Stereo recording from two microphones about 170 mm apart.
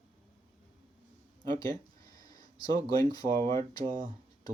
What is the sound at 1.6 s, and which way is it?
Speech, 20° left (ahead or behind).